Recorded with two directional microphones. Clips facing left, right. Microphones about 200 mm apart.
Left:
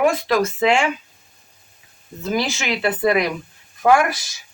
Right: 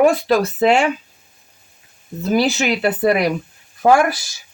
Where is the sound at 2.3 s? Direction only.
35° right (ahead or behind).